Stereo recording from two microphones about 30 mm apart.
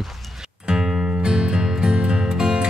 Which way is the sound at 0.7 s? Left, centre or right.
Right.